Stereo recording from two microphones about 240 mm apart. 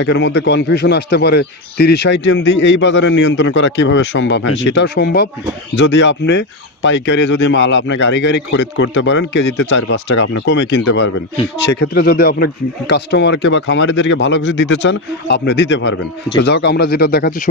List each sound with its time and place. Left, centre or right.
0.0 s speech: left